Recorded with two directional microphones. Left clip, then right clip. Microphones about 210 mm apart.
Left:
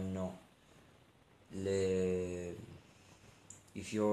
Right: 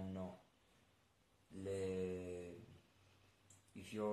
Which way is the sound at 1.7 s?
35° left (ahead or behind).